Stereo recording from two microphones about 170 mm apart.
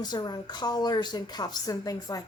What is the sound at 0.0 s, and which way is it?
A woman's voice, 25° left (ahead or behind).